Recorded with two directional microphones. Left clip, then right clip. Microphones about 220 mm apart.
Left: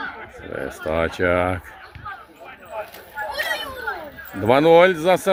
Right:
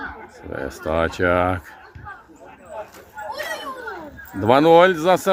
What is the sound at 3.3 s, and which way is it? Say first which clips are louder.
Chatter: left 3 dB; 30° left (ahead or behind).